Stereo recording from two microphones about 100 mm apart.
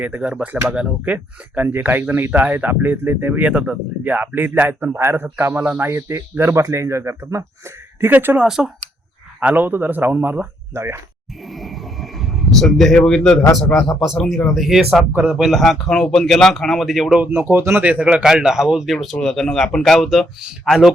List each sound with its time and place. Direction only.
0.0 s speech: 15° right (ahead or behind)
5.9 s speech: 30° right (ahead or behind)
8.4 s speech: 5° right (ahead or behind)
9.4 s speech: 15° right (ahead or behind)
11.4 s speech: centre (ahead or behind)
17.2 s speech: 20° right (ahead or behind); by 20.9 s 5° right (ahead or behind)